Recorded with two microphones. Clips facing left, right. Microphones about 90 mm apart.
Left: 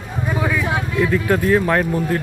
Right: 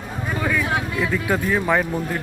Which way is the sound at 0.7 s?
5° right (ahead or behind).